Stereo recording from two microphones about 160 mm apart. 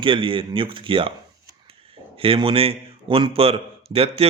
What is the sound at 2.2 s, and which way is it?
A man's voice, 35° right (ahead or behind).